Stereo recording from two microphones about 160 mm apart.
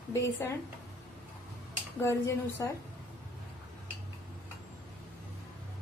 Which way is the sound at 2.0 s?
20° left (ahead or behind).